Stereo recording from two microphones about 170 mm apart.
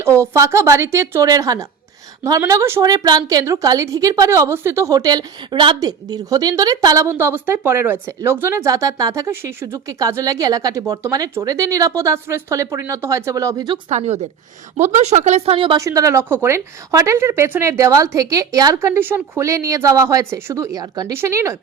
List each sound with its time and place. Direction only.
0.0 s a woman's voice: 15° right (ahead or behind)
13.9 s a woman's voice: 40° right (ahead or behind)
15.8 s a woman's voice: 20° right (ahead or behind)